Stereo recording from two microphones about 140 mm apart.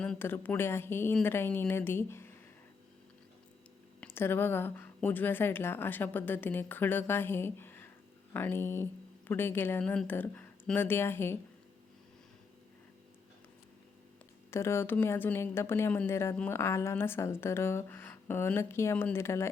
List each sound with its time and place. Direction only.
0.0 s a woman's voice: 10° left (ahead or behind)
4.0 s a woman's voice: 15° left (ahead or behind)
14.5 s a woman's voice: 20° left (ahead or behind)